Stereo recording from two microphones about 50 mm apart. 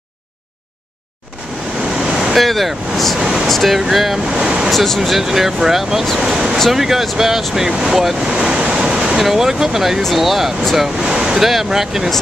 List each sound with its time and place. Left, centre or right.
1.9 s waves: centre
2.3 s speech: centre
3.2 s a sound: centre
3.4 s speech: centre
4.3 s a sound: centre
4.6 s speech: centre
5.1 s speech: centre
8.3 s waves: centre
9.2 s speech: centre
11.0 s speech: centre